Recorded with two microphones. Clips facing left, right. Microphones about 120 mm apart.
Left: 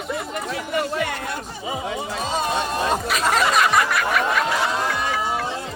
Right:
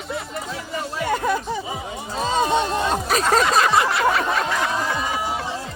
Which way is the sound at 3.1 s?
35° right (ahead or behind).